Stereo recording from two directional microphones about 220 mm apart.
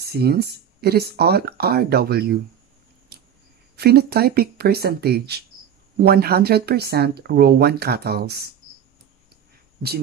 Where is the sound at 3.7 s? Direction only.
45° right (ahead or behind).